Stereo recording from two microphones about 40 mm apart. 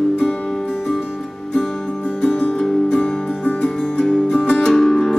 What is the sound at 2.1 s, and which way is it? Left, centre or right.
Music, left.